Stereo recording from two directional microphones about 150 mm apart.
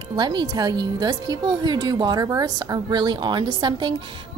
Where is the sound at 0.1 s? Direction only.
30° right (ahead or behind).